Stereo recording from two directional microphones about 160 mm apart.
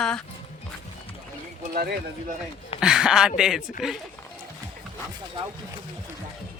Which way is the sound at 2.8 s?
5° right (ahead or behind).